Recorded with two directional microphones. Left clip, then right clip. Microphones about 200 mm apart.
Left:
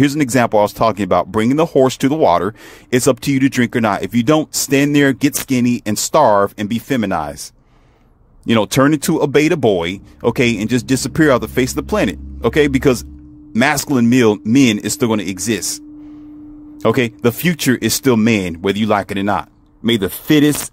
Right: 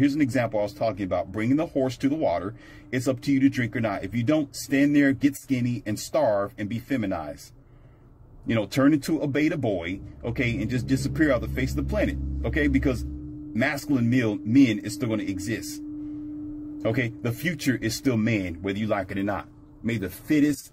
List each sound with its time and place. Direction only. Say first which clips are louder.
0.0 s speech: left 9 dB; 40° left (ahead or behind)
8.5 s speech: left 9 dB; 40° left (ahead or behind)
16.8 s speech: left 13 dB; 40° left (ahead or behind)